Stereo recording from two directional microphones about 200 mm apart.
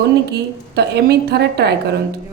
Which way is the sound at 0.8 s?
55° right (ahead or behind).